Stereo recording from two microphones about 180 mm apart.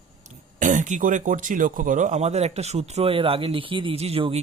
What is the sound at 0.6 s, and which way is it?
Speech, 45° right (ahead or behind).